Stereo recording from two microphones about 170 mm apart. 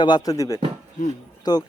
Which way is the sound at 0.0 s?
25° left (ahead or behind).